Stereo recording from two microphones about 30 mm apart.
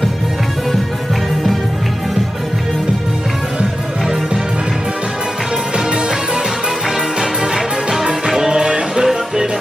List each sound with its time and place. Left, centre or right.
7.2 s music: centre
8.5 s music: right